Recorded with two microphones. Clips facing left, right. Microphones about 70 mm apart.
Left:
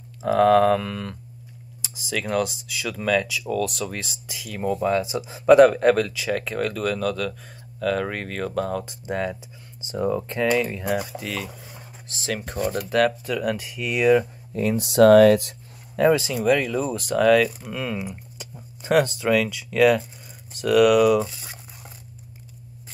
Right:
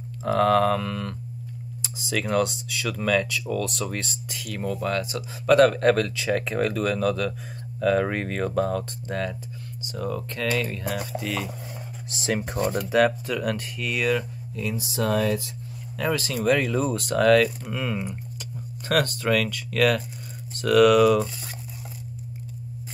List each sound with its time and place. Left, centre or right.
0.2 s speech: centre
5.7 s speech: centre
8.8 s speech: centre
12.7 s speech: centre
14.5 s speech: left
16.0 s speech: centre
16.4 s speech: centre
18.4 s speech: centre